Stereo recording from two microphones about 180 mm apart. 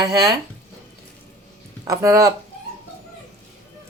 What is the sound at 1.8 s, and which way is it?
Speech, 15° right (ahead or behind).